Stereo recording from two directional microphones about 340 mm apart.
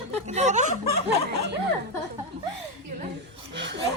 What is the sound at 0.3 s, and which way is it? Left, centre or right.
Speech, centre.